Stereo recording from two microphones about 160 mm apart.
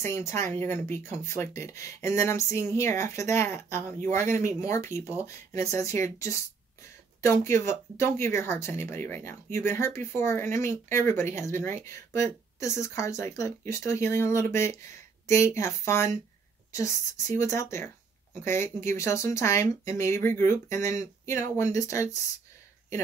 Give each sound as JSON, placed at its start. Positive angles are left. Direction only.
{"t": 0.0, "sound": "speech", "side_deg": 15}